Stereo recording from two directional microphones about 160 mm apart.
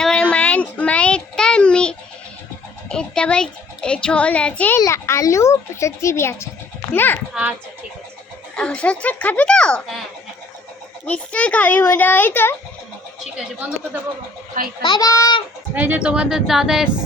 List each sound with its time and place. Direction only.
0.0 s child singing: 5° left (ahead or behind)
2.9 s a child's voice: 5° left (ahead or behind)
8.5 s a child's voice: 5° left (ahead or behind)
11.0 s a child's voice: 10° left (ahead or behind)
14.8 s a child's voice: 25° left (ahead or behind)
15.7 s speech: 10° right (ahead or behind)